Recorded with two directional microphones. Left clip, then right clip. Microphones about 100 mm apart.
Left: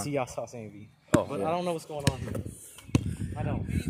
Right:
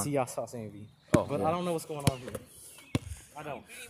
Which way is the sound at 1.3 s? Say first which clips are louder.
Left 1 dB; 45° right (ahead or behind).